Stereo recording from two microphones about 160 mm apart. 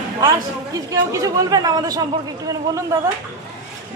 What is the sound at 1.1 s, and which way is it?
Speech, 20° right (ahead or behind).